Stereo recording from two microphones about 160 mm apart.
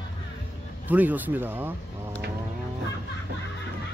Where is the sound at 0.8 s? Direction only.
10° right (ahead or behind).